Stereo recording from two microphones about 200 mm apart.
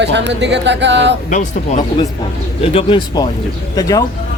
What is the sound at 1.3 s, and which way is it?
Speech, 40° left (ahead or behind).